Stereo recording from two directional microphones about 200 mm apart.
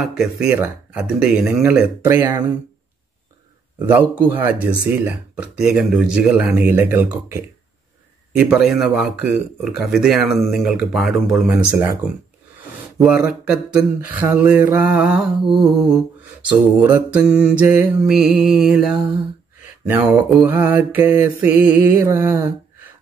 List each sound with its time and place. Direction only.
0.0 s speech: centre (ahead or behind)
3.8 s speech: 10° right (ahead or behind)
19.9 s speech: 10° right (ahead or behind)